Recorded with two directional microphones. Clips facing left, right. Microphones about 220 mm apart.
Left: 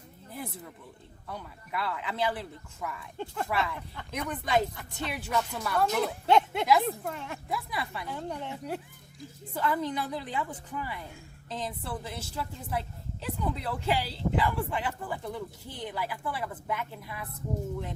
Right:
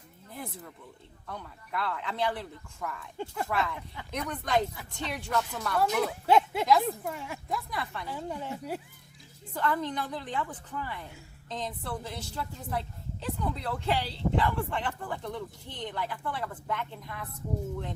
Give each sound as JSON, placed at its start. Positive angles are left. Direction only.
{"t": 1.3, "sound": "speech", "side_deg": 5}
{"t": 7.7, "sound": "speech", "side_deg": 10}
{"t": 8.0, "sound": "speech", "side_deg": 0}
{"t": 9.6, "sound": "speech", "side_deg": 5}